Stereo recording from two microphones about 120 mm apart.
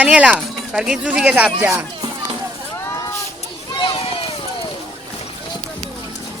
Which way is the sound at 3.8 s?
50° left (ahead or behind).